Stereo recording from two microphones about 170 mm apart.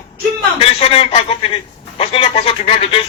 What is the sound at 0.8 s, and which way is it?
A man's voice, 35° left (ahead or behind).